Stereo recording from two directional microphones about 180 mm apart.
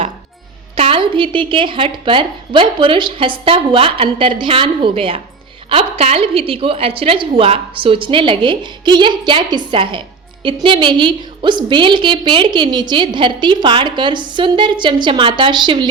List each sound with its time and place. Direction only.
0.8 s a woman's voice: 30° right (ahead or behind)